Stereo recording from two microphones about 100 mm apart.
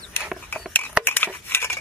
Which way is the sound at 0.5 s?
15° left (ahead or behind).